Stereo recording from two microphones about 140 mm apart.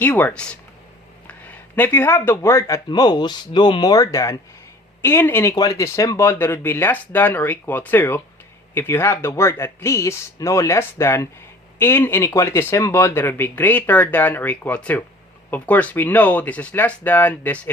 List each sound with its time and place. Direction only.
0.0 s speech: 10° left (ahead or behind)